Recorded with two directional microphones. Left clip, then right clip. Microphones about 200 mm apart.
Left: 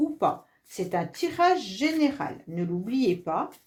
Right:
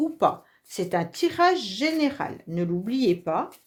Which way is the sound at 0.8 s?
45° right (ahead or behind).